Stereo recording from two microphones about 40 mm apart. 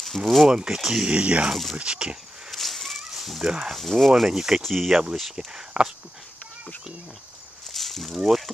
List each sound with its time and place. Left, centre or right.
0.2 s speech: centre
1.0 s speech: right
1.5 s speech: centre
1.8 s speech: right
2.5 s a sound: centre
3.4 s speech: centre
3.7 s speech: centre
4.3 s speech: centre
4.6 s speech: centre
5.7 s speech: right
7.7 s snake: centre